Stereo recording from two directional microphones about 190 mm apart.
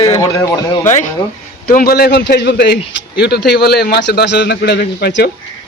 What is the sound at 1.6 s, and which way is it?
A man's voice, 50° left (ahead or behind).